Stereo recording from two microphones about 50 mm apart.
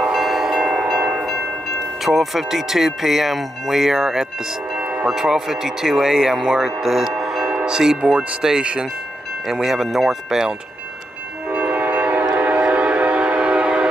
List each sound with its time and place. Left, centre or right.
0.0 s train: centre
2.0 s speech: centre
4.7 s music: right
5.1 s speech: centre
6.8 s a sound: centre
7.5 s speech: centre
8.0 s speech: right
8.4 s speech: centre
11.4 s train: right